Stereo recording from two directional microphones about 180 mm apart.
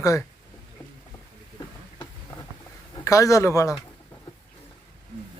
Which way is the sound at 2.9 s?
15° left (ahead or behind).